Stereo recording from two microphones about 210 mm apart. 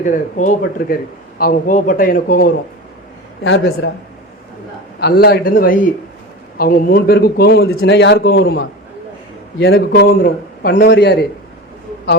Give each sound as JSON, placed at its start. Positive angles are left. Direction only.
{"t": 0.0, "sound": "a man's voice", "side_deg": 35}
{"t": 3.4, "sound": "a man's voice", "side_deg": 60}
{"t": 4.9, "sound": "a man's voice", "side_deg": 50}
{"t": 10.8, "sound": "a man's voice", "side_deg": 60}